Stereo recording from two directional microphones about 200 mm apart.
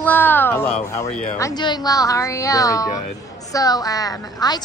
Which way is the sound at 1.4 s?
20° left (ahead or behind).